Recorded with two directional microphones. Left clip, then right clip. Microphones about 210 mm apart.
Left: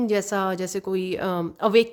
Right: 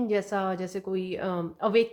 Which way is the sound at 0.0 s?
45° left (ahead or behind).